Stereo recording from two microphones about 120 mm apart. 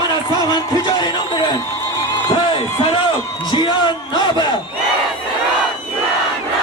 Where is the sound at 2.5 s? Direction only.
50° left (ahead or behind).